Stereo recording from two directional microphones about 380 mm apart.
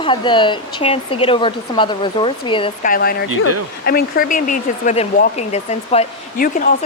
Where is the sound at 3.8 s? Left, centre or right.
Left.